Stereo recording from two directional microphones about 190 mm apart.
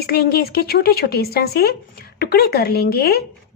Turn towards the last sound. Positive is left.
turn(degrees=55)  # may be behind; listen again after turning